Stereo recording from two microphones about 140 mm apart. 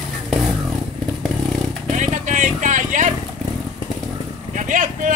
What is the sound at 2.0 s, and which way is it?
Vehicle, 60° right (ahead or behind).